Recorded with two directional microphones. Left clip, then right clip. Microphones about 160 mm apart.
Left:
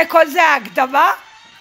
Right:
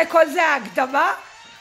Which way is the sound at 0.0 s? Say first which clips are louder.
Left 4 dB; 25° left (ahead or behind).